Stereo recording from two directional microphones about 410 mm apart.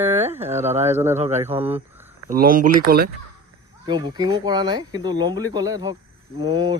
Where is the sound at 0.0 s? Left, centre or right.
Centre.